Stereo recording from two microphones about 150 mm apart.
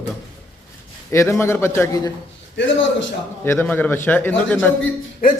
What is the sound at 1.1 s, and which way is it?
A man's voice, 20° left (ahead or behind).